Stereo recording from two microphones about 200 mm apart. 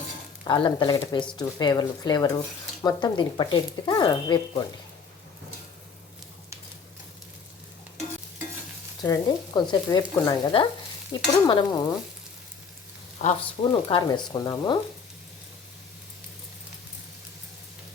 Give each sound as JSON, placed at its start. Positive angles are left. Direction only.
{"t": 0.4, "sound": "speech", "side_deg": 25}
{"t": 0.9, "sound": "speech", "side_deg": 15}
{"t": 9.0, "sound": "speech", "side_deg": 20}
{"t": 13.2, "sound": "speech", "side_deg": 25}